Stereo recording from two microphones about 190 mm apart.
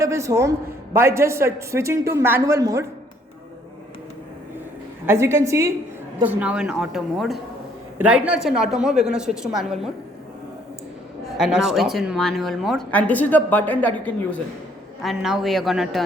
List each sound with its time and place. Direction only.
0.0 s a man's voice: 15° right (ahead or behind)
5.0 s a man's voice: 15° right (ahead or behind)
11.3 s speech: 5° right (ahead or behind)